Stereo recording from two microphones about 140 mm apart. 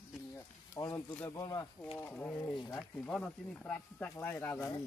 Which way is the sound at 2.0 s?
15° left (ahead or behind).